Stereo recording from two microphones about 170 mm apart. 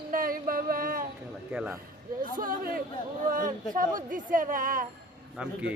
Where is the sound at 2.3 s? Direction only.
55° right (ahead or behind).